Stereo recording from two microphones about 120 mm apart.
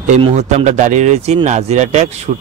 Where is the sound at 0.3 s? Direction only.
70° right (ahead or behind).